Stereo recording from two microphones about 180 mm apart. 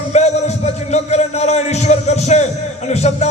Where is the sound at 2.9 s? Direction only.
40° left (ahead or behind).